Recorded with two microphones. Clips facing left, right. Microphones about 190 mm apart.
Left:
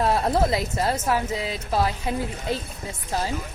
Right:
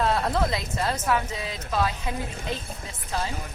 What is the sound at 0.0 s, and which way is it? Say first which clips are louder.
Speech: left 3 dB; 25° left (ahead or behind).